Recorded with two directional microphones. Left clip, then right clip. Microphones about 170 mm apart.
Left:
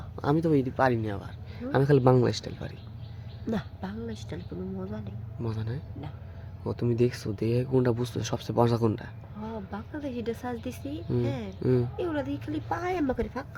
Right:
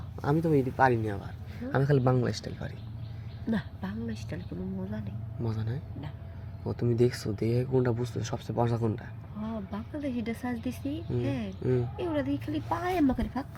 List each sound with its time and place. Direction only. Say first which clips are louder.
0.2 s speech: left 2 dB; 25° left (ahead or behind)
0.8 s speech: right 1 dB; 15° left (ahead or behind)
3.4 s speech: left 1 dB; 40° left (ahead or behind); by 5.5 s 20° left (ahead or behind)
5.5 s speech: left 2 dB; 10° left (ahead or behind)
7.7 s a man's voice: left 2 dB; 30° left (ahead or behind)
9.5 s speech: left 1 dB; 20° left (ahead or behind)
11.6 s a man's voice: left 3 dB; 35° left (ahead or behind)
11.9 s speech: even; 25° left (ahead or behind)